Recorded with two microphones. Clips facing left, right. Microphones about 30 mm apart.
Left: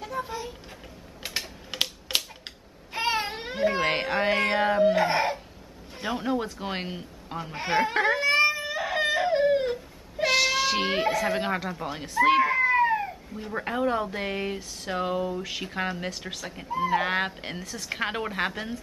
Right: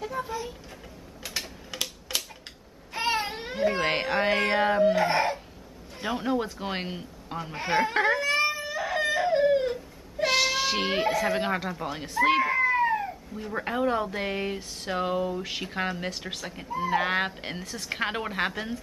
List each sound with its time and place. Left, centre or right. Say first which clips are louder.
0.0 s a sound: right 1 dB; centre
1.2 s mechanisms: left 2 dB; left
1.7 s typewriter: left 5 dB; left
2.9 s baby cry: left 1 dB; centre
5.9 s speech: even; centre
8.2 s a sound: left 3 dB; centre
10.2 s speech: left 1 dB; centre